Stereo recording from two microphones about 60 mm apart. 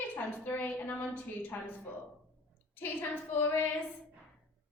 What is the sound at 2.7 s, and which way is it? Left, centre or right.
Speech, left.